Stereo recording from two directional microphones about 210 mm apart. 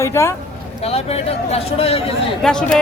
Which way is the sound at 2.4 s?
5° left (ahead or behind).